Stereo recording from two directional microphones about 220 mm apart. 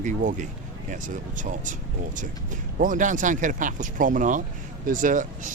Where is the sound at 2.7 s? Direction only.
35° right (ahead or behind).